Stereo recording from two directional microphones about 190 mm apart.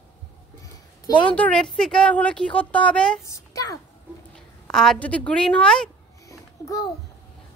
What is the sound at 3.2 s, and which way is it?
Speech, 15° left (ahead or behind).